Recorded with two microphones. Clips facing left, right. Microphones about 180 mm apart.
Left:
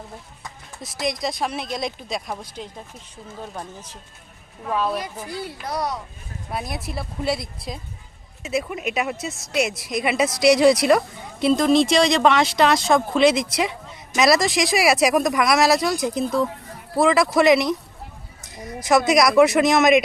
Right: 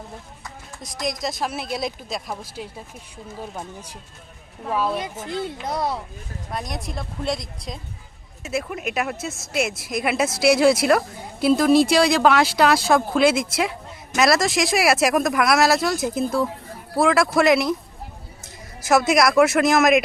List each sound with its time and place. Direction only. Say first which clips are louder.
0.8 s speech: left 2 dB; centre (ahead or behind)
4.9 s speech: right 2 dB; 20° right (ahead or behind)
6.5 s speech: left 1 dB; 5° left (ahead or behind)
18.8 s speech: left 1 dB; 5° right (ahead or behind)